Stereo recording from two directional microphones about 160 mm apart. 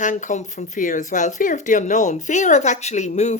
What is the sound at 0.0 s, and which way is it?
Speech, 50° left (ahead or behind).